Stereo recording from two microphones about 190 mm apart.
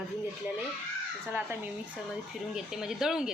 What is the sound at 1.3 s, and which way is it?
A woman's voice, 10° right (ahead or behind).